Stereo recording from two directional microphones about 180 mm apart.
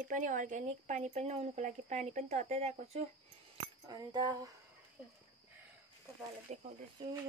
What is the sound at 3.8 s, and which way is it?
Speech, 20° right (ahead or behind).